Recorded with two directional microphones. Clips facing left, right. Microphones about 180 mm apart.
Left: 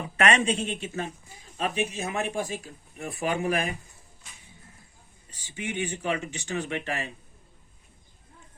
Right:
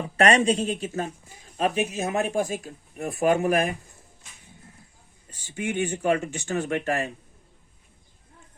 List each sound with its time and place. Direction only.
0.2 s speech: 35° right (ahead or behind)
5.3 s speech: 45° right (ahead or behind)